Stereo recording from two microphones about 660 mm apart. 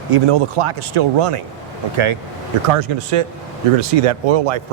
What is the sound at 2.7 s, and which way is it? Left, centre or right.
Speech, right.